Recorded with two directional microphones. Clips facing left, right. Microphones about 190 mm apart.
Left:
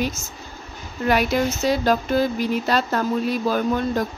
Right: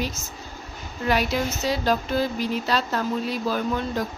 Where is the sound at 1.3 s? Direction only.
50° left (ahead or behind).